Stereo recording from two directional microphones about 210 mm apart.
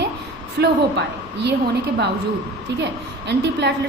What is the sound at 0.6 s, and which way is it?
Speech, 55° right (ahead or behind).